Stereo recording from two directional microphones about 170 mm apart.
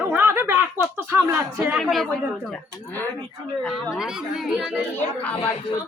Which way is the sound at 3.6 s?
Centre (ahead or behind).